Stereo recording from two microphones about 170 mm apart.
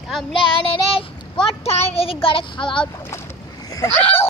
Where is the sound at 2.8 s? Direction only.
15° left (ahead or behind).